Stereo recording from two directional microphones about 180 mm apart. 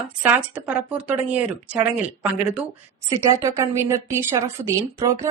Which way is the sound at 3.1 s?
20° right (ahead or behind).